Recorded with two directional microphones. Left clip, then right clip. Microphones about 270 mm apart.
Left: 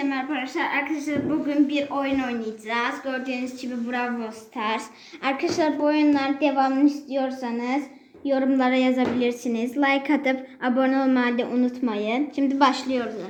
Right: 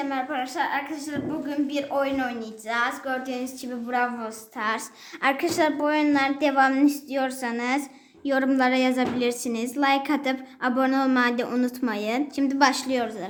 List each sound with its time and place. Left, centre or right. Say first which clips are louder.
0.1 s a woman's voice: even; centre